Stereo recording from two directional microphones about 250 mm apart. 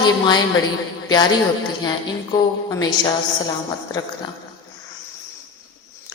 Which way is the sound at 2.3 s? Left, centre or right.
Centre.